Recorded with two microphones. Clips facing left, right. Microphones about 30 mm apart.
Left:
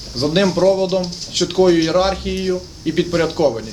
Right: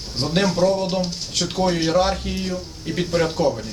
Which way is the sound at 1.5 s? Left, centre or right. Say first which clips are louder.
Left 7 dB; centre.